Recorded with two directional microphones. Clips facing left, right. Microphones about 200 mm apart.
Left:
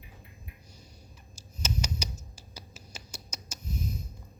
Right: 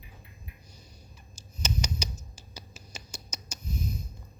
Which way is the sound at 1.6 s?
5° left (ahead or behind).